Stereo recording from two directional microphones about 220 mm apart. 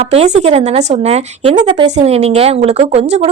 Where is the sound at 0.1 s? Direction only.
25° right (ahead or behind).